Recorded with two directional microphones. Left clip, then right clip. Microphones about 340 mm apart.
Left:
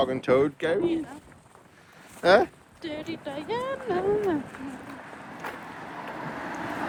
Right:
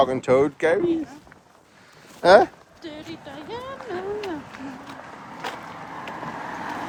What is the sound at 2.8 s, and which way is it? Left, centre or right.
Speech, left.